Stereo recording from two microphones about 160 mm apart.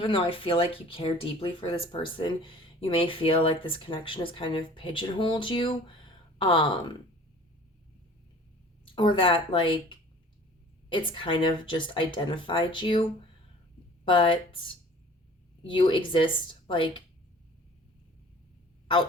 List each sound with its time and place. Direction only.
0.0 s speech: 35° left (ahead or behind)
8.8 s a woman's voice: 30° left (ahead or behind)